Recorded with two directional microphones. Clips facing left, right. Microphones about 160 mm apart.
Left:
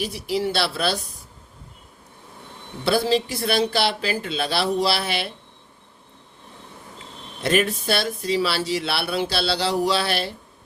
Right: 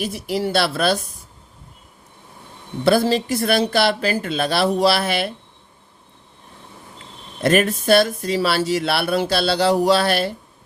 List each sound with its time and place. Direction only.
0.0 s speech: 50° right (ahead or behind)
2.8 s speech: 50° right (ahead or behind)
7.4 s speech: 50° right (ahead or behind)